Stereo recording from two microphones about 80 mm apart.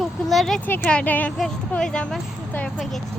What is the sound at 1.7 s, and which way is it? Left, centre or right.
Speech, centre.